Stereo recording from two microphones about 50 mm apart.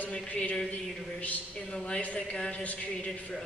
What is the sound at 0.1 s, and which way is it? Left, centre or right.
Speech, centre.